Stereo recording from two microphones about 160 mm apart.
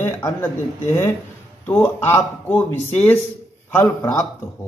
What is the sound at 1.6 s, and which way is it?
A man's voice, 10° left (ahead or behind).